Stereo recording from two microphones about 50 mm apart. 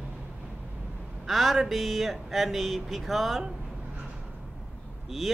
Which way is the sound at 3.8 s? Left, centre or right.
Right.